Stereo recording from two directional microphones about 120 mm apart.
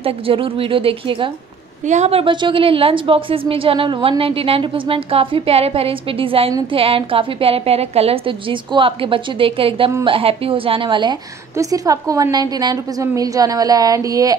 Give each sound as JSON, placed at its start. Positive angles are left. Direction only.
{"t": 0.0, "sound": "a woman's voice", "side_deg": -50}
{"t": 1.9, "sound": "a woman's voice", "side_deg": -65}
{"t": 11.5, "sound": "a woman's voice", "side_deg": -30}